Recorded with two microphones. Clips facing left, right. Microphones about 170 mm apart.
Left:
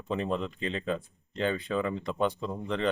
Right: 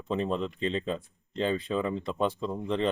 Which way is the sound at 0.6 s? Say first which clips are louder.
Right 2 dB; 30° right (ahead or behind).